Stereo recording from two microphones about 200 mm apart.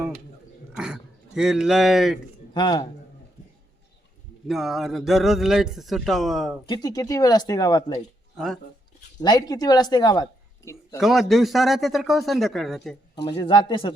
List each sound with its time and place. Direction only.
1.4 s speech: centre (ahead or behind)
2.5 s a man's voice: 20° left (ahead or behind)
4.4 s speech: centre (ahead or behind)
6.7 s speech: 20° left (ahead or behind)
9.2 s speech: 20° left (ahead or behind)
11.0 s speech: centre (ahead or behind)
13.2 s speech: 20° left (ahead or behind)